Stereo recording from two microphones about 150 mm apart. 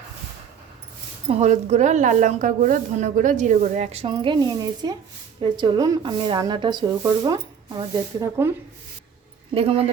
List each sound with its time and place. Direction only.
1.3 s a woman's voice: 50° right (ahead or behind)
4.1 s a woman's voice: 30° right (ahead or behind)
9.6 s speech: 40° right (ahead or behind)